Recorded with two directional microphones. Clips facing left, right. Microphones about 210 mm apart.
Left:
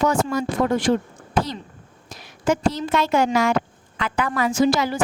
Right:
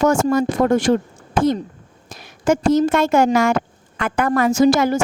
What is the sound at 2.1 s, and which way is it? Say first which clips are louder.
A woman's voice: right 4 dB; 45° right (ahead or behind).